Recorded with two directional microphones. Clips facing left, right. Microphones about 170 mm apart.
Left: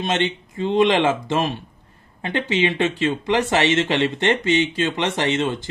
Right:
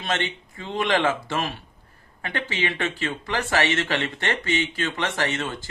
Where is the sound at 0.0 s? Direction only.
20° left (ahead or behind).